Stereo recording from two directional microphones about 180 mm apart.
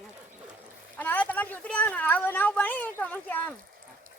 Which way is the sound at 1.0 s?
10° left (ahead or behind).